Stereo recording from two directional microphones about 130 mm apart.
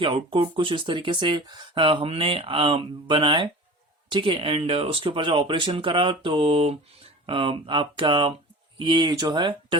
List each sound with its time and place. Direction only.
0.0 s speech: 40° right (ahead or behind)